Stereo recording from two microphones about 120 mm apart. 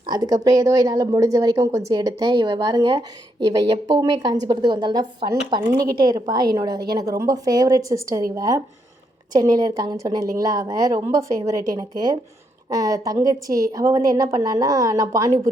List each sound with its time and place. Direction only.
0.0 s a woman's voice: 35° right (ahead or behind)
1.9 s a woman's voice: 35° right (ahead or behind)